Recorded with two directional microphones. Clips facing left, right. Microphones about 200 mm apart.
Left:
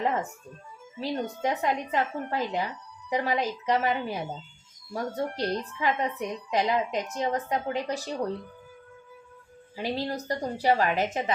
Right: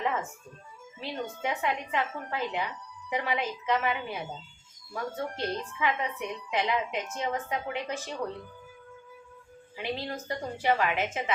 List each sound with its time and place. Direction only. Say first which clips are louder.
0.0 s music: left 3 dB; 40° left (ahead or behind)
0.9 s a woman's voice: left 5 dB; 40° left (ahead or behind)
9.7 s a woman's voice: left 4 dB; 40° left (ahead or behind)